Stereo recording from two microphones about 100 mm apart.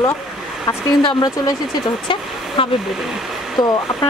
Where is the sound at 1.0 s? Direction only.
55° left (ahead or behind).